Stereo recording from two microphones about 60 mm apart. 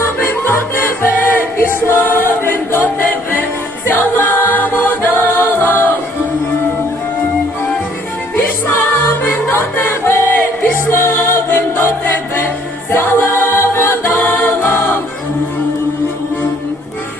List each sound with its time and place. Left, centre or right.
0.0 s music: left
3.8 s music: left
8.4 s music: left
12.9 s choir: left